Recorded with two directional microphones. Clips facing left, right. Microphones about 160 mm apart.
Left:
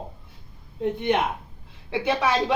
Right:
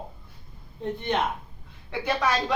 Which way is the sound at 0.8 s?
10° left (ahead or behind).